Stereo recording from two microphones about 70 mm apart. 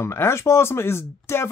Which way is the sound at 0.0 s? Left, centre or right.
Left.